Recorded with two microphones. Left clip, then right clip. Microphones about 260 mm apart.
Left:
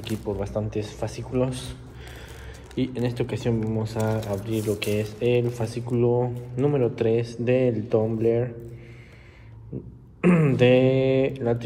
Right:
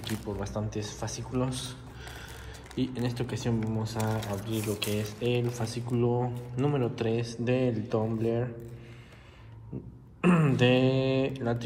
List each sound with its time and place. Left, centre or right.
0.2 s speech: centre
6.3 s a man's voice: centre
6.6 s speech: centre
10.2 s speech: centre